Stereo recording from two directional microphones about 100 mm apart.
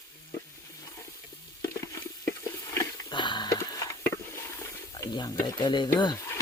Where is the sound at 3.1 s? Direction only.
50° left (ahead or behind).